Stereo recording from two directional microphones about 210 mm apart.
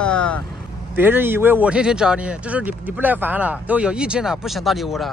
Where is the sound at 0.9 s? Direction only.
10° right (ahead or behind).